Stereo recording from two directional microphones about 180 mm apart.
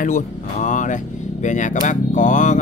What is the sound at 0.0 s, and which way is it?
Speech, 45° left (ahead or behind).